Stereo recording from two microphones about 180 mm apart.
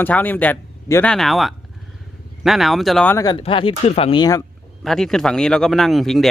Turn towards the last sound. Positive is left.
turn(degrees=0)  # may be behind; listen again after turning